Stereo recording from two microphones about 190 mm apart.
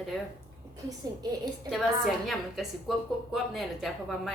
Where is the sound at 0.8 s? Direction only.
20° right (ahead or behind).